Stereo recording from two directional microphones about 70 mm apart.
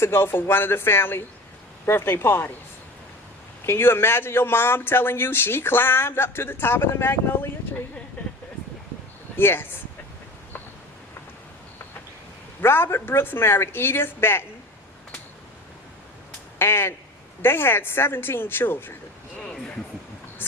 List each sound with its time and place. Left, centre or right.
0.0 s speech: left
3.7 s speech: left
9.4 s speech: left
12.6 s speech: left
16.6 s speech: left
19.4 s speech: centre